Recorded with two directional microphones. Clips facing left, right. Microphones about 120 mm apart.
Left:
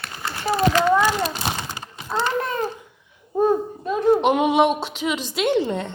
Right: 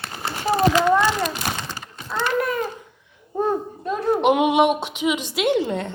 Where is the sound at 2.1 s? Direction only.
25° left (ahead or behind).